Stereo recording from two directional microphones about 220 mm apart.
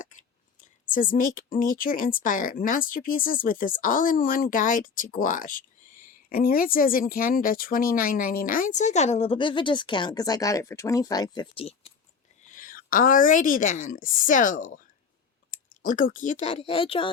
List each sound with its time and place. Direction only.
0.0 s clicking: 35° left (ahead or behind)
0.9 s a woman's voice: 35° left (ahead or behind)
12.5 s a woman's voice: 40° left (ahead or behind)